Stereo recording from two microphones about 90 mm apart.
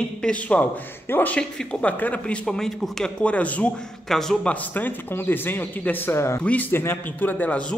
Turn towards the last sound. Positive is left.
turn(degrees=15)  # may be behind; listen again after turning